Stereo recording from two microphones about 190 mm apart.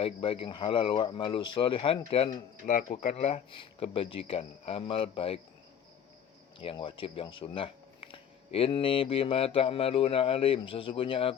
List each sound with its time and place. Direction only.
0.0 s speech: 30° left (ahead or behind)
2.6 s speech: 45° left (ahead or behind)
6.6 s speech: 25° left (ahead or behind)